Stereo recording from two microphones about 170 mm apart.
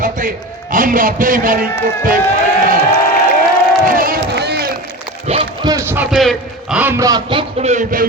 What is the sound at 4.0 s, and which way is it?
Crowd, 60° right (ahead or behind).